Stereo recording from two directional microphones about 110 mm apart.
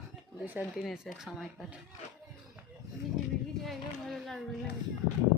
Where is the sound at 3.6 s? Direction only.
Centre (ahead or behind).